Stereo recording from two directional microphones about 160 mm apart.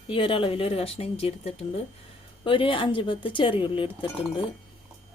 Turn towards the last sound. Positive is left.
turn(degrees=30)  # may be behind; listen again after turning